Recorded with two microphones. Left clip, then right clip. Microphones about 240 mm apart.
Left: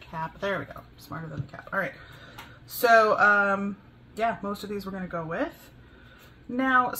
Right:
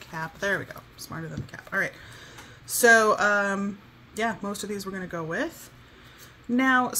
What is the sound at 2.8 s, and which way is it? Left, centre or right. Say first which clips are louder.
Speech: even; right.